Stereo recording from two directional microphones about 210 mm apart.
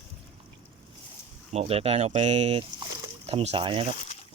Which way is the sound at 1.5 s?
30° right (ahead or behind).